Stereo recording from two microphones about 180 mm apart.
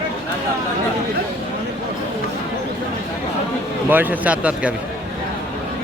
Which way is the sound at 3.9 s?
10° right (ahead or behind).